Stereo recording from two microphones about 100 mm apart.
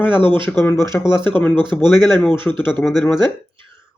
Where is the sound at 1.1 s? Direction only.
55° right (ahead or behind).